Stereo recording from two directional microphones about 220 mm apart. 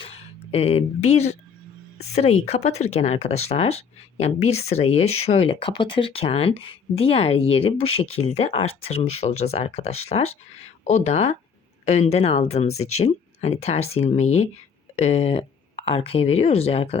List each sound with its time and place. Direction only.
0.0 s speech: 25° left (ahead or behind)